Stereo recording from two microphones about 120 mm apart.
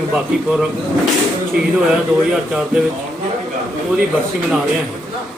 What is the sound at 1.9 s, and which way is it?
Speech, 5° right (ahead or behind).